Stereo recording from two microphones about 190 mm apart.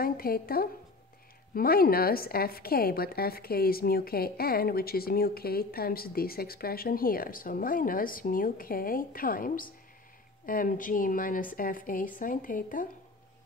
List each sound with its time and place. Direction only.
0.0 s a woman's voice: 50° left (ahead or behind)